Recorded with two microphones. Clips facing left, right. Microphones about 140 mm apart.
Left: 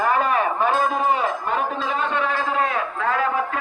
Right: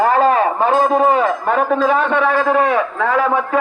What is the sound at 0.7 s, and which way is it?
Speech, 25° right (ahead or behind).